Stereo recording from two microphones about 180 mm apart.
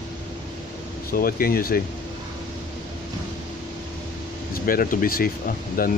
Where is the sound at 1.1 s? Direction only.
55° left (ahead or behind).